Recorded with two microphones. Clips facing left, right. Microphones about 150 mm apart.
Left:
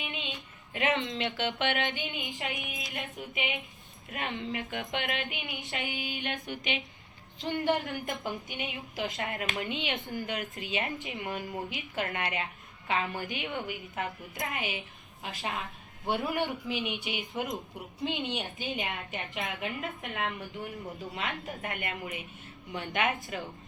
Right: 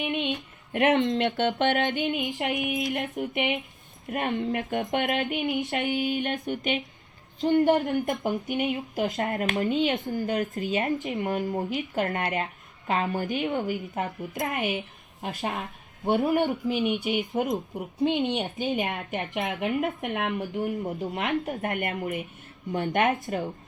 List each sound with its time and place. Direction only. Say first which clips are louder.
0.0 s a woman's voice: right 11 dB; 50° right (ahead or behind)
20.4 s a woman's voice: right 10 dB; 45° right (ahead or behind)